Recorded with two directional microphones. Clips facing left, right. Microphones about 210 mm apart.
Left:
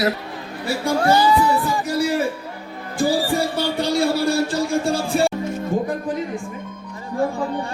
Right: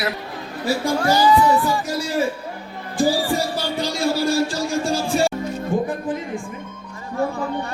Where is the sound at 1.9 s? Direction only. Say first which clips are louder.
Left 5 dB; 60° left (ahead or behind).